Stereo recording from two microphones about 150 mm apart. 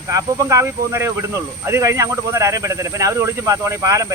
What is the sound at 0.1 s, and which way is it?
Speech, 20° right (ahead or behind).